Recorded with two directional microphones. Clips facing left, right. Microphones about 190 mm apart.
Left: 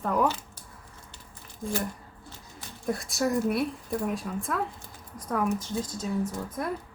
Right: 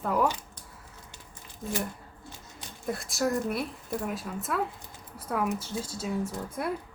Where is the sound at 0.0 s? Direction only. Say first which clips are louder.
Left 1 dB; 5° right (ahead or behind).